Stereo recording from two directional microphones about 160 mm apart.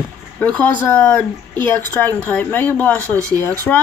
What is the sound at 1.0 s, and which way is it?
A woman's voice, 10° left (ahead or behind).